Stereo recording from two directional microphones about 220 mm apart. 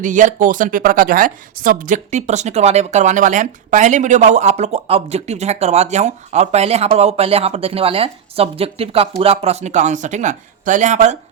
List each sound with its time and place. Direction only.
0.0 s speech: 35° right (ahead or behind)